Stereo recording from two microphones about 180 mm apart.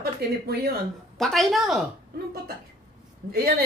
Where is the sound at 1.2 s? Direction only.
Centre (ahead or behind).